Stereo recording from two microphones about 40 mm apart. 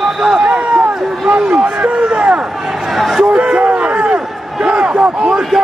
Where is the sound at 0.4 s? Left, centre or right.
Right.